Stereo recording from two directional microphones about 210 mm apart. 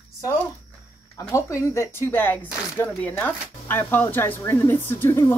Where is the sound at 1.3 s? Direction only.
15° left (ahead or behind).